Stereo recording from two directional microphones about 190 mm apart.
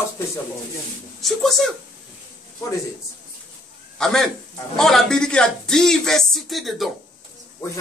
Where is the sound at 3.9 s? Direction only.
Centre (ahead or behind).